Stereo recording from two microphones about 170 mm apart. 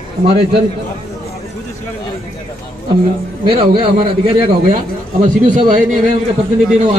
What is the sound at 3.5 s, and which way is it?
A man's voice, 30° right (ahead or behind).